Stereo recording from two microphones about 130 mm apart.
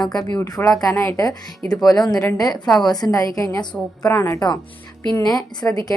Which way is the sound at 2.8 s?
30° left (ahead or behind).